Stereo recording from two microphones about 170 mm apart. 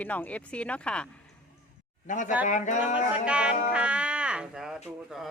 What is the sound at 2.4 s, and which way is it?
Speech, 45° left (ahead or behind).